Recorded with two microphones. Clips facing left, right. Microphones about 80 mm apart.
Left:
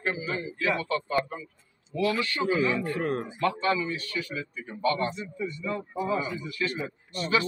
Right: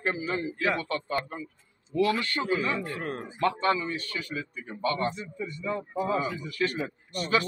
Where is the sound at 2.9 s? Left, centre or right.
Centre.